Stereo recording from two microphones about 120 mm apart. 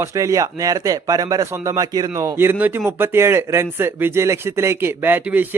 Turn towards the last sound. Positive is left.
turn(degrees=-15)  # may be behind; listen again after turning